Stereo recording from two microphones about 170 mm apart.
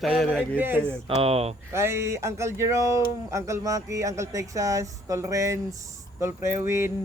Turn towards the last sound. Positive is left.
turn(degrees=-15)  # may be behind; listen again after turning